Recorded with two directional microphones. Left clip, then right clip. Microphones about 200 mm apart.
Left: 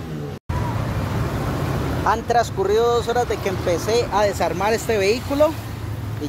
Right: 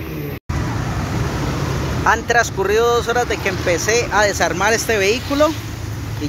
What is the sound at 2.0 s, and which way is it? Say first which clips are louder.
Speech: right 4 dB; 5° left (ahead or behind).